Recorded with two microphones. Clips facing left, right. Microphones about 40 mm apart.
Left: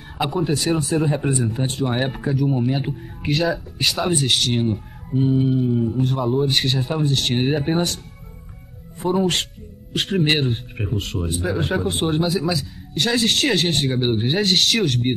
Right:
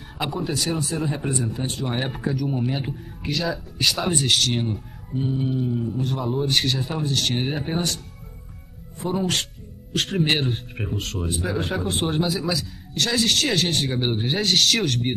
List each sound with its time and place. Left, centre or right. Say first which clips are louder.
0.2 s speech: left 5 dB; centre
5.1 s mantra: left 6 dB; centre
6.0 s speech: left 4 dB; centre
9.0 s speech: left 4 dB; centre
9.9 s mantra: left 2 dB; centre
10.3 s speech: left 2 dB; centre